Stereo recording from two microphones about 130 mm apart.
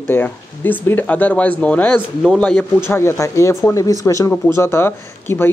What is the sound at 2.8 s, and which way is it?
Speech, 20° left (ahead or behind).